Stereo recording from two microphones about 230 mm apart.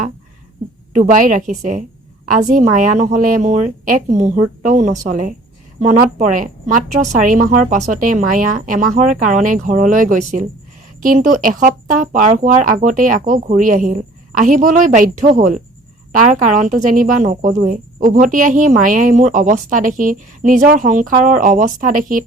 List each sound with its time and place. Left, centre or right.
0.9 s speech: right